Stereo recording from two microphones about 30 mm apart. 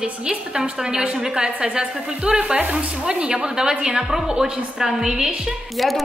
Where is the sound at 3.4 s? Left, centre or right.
Right.